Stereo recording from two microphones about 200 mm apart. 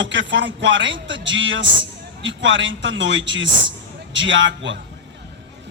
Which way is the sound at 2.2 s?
65° right (ahead or behind).